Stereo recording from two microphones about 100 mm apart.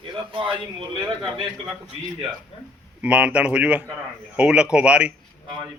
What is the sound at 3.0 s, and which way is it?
A man's voice, 10° right (ahead or behind).